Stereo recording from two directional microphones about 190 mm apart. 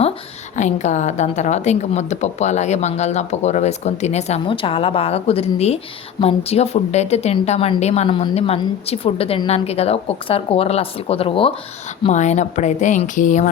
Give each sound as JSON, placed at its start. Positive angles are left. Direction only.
{"t": 0.5, "sound": "a woman's voice", "side_deg": 40}